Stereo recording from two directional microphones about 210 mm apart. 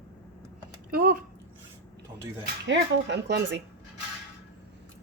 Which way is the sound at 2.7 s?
55° right (ahead or behind).